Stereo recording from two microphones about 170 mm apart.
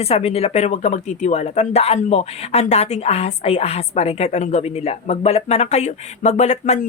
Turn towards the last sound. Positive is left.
turn(degrees=40)  # may be behind; listen again after turning